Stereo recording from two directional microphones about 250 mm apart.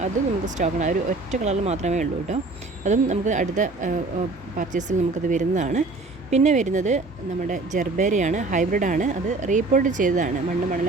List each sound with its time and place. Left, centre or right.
0.0 s speech: right